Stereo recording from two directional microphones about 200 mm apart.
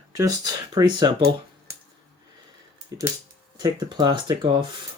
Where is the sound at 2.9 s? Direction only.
20° right (ahead or behind).